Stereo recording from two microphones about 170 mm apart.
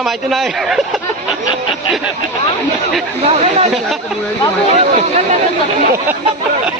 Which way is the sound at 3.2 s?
40° right (ahead or behind).